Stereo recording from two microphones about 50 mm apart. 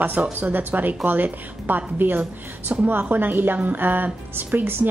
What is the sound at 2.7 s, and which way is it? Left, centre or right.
Speech, right.